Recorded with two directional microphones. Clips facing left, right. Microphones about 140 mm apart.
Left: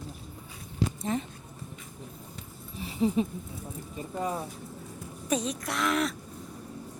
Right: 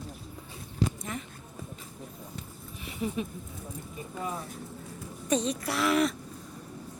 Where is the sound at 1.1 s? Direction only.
30° left (ahead or behind).